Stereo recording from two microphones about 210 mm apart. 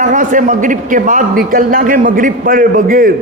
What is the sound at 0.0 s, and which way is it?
A man's voice, 40° right (ahead or behind).